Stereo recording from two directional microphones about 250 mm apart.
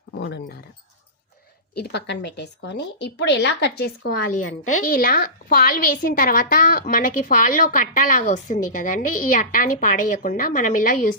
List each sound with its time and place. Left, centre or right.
0.1 s speech: left
1.8 s a woman's voice: left